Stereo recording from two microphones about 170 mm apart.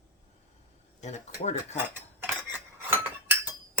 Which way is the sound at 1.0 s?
45° left (ahead or behind).